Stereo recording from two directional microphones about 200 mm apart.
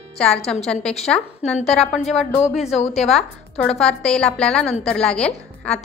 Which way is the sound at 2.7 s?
35° left (ahead or behind).